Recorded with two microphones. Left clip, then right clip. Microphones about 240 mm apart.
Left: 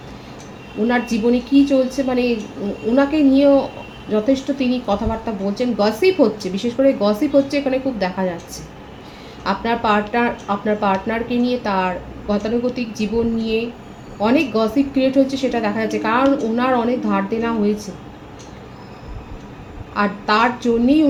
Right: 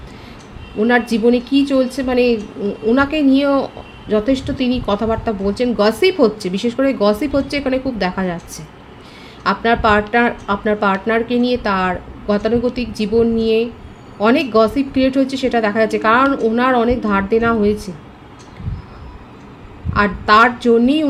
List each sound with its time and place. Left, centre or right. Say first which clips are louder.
0.9 s speech: right 4 dB; right
9.4 s speech: right 5 dB; right
19.9 s speech: right 5 dB; right